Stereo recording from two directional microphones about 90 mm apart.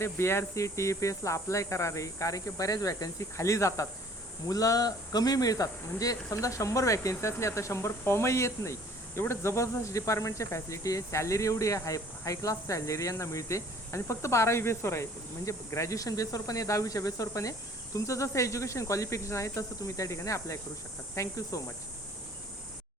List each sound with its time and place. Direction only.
0.0 s speech: 30° left (ahead or behind)